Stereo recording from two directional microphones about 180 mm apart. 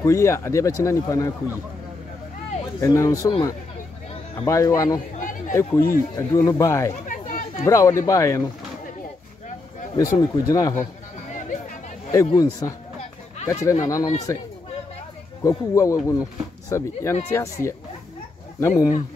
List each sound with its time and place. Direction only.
0.0 s speech: 15° left (ahead or behind)
2.8 s speech: 15° left (ahead or behind)
5.1 s chatter: 50° left (ahead or behind)
5.5 s speech: 15° left (ahead or behind)
6.9 s chatter: 45° left (ahead or behind)
7.6 s speech: 15° left (ahead or behind)
9.9 s speech: 20° left (ahead or behind)
12.3 s speech: 20° left (ahead or behind)
15.4 s speech: 15° left (ahead or behind)